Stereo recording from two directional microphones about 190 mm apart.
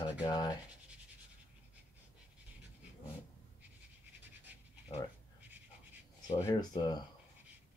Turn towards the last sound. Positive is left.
turn(degrees=20)  # may be behind; listen again after turning